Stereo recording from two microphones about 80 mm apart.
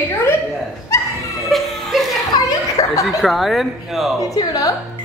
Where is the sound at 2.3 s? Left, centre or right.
Left.